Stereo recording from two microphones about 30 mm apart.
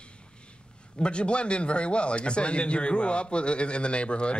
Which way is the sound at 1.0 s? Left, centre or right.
Left.